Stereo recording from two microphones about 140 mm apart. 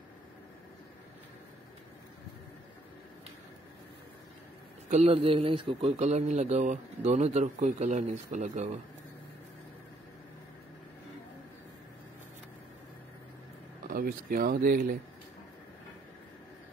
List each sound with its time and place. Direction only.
4.9 s speech: 45° right (ahead or behind)
13.8 s speech: 90° right